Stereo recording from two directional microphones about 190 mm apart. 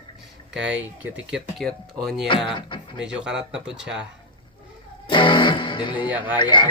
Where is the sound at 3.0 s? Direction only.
5° right (ahead or behind).